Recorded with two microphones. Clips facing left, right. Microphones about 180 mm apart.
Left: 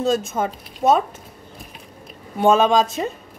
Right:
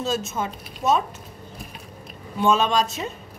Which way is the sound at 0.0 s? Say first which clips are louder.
Left 5 dB; 55° left (ahead or behind).